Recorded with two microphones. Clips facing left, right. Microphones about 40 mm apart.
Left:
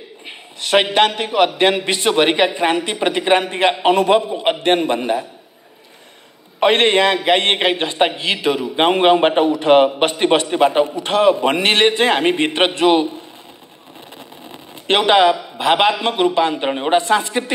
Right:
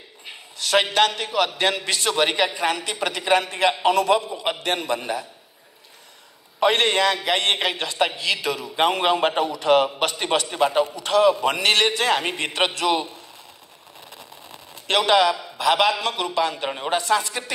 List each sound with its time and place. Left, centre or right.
0.2 s a man's voice: left
6.6 s a man's voice: left
14.5 s a man's voice: left